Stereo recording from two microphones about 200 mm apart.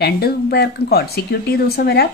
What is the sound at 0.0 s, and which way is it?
A woman's voice, 50° left (ahead or behind).